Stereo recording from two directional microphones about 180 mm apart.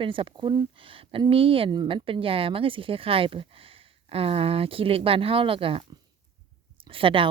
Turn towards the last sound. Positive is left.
turn(degrees=-30)  # may be behind; listen again after turning